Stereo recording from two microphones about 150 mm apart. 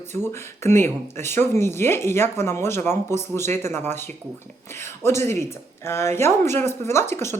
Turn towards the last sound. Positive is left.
turn(degrees=15)  # may be behind; listen again after turning